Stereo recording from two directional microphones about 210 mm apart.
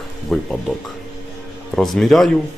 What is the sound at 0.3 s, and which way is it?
Speech, centre (ahead or behind).